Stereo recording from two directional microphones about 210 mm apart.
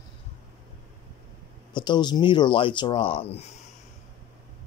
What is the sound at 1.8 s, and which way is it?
Speech, 20° left (ahead or behind).